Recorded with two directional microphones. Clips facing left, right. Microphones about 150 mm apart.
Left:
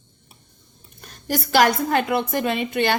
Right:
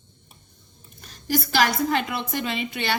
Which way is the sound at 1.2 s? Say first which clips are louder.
Left 4 dB; 50° left (ahead or behind).